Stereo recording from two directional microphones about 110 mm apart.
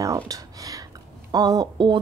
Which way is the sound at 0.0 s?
30° right (ahead or behind).